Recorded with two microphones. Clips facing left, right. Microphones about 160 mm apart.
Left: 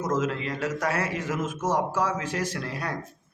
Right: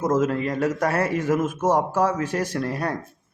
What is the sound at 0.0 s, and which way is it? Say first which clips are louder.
Speech: right 5 dB; 50° right (ahead or behind).